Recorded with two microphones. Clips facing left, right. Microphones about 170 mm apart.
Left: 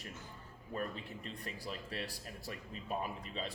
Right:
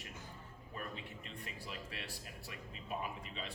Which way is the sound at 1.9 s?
35° left (ahead or behind).